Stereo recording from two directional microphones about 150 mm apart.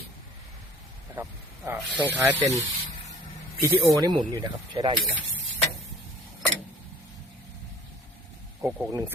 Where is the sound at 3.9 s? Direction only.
25° right (ahead or behind).